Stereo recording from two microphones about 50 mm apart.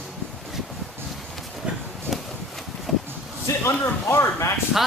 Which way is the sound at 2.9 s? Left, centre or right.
Centre.